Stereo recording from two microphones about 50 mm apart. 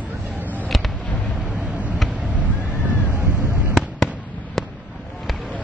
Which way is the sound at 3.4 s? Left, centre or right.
Right.